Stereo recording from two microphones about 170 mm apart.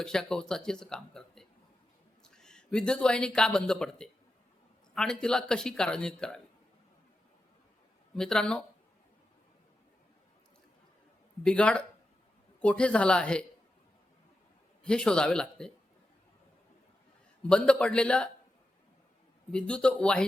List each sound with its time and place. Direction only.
0.0 s speech: 5° left (ahead or behind)
8.1 s speech: 5° left (ahead or behind)
11.4 s speech: 5° left (ahead or behind)
14.8 s speech: 5° left (ahead or behind)
17.5 s speech: 5° left (ahead or behind)
19.5 s speech: 5° left (ahead or behind)